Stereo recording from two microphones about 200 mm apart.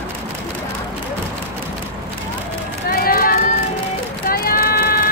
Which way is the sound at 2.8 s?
50° left (ahead or behind).